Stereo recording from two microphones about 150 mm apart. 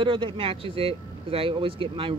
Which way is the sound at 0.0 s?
35° right (ahead or behind).